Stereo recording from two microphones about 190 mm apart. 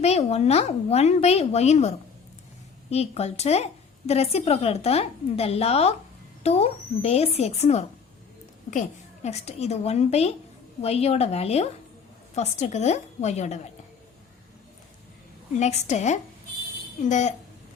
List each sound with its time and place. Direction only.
0.0 s a woman's voice: 35° left (ahead or behind)
15.5 s a woman's voice: 35° left (ahead or behind)